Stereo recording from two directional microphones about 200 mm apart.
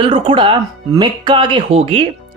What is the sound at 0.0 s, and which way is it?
Speech, 25° right (ahead or behind).